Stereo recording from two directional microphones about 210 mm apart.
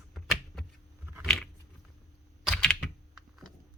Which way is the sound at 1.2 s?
Centre (ahead or behind).